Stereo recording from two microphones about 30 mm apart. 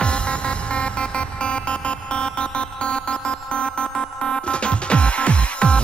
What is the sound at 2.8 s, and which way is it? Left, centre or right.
Music, left.